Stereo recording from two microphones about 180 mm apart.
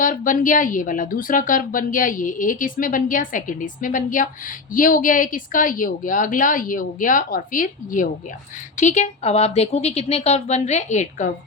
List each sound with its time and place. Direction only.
0.0 s a woman's voice: 45° left (ahead or behind)